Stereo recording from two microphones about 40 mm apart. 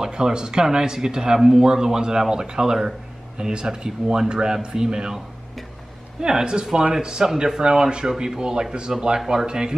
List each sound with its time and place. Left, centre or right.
0.0 s speech: centre
6.2 s speech: centre